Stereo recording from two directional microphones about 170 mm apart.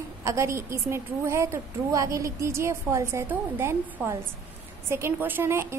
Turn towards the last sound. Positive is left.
turn(degrees=-15)  # may be behind; listen again after turning